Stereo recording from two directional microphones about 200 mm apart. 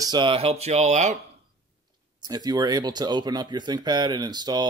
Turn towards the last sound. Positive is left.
turn(degrees=-20)  # may be behind; listen again after turning